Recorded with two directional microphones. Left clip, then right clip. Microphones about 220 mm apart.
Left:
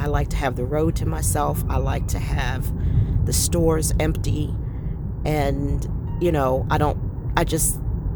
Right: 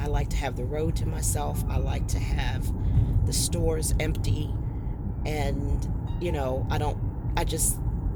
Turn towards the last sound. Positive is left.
turn(degrees=35)  # may be behind; listen again after turning